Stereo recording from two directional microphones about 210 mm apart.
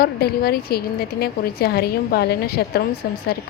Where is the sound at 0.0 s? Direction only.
45° left (ahead or behind).